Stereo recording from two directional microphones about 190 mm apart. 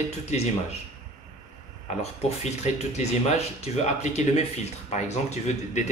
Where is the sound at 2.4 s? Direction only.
35° left (ahead or behind).